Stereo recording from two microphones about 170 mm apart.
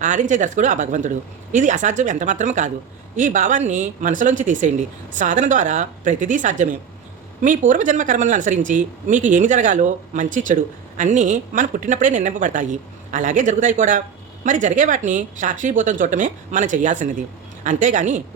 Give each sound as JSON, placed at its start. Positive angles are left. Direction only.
{"t": 0.0, "sound": "speech", "side_deg": -45}